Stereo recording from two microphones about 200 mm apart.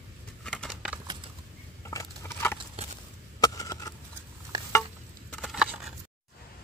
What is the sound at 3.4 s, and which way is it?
Chop, 15° left (ahead or behind).